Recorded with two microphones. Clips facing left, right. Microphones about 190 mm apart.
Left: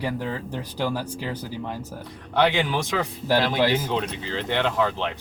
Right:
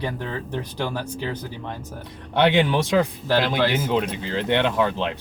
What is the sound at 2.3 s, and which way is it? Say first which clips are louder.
Speech: right 3 dB; 25° right (ahead or behind).